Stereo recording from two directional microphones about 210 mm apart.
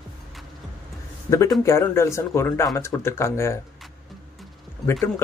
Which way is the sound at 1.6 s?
15° left (ahead or behind).